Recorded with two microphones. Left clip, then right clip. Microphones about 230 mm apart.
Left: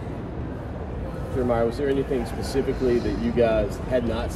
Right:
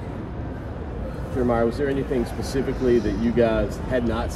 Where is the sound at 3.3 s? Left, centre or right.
Right.